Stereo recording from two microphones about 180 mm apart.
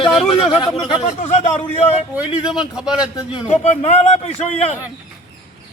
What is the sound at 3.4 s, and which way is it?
A man's voice, 40° left (ahead or behind).